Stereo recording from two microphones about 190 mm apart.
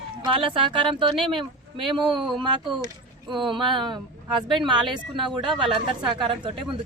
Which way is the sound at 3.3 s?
25° right (ahead or behind).